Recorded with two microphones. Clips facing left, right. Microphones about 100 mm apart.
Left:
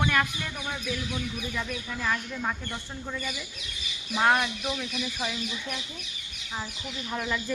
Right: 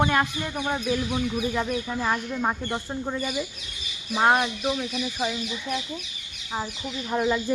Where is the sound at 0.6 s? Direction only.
35° right (ahead or behind); by 5.4 s 10° right (ahead or behind).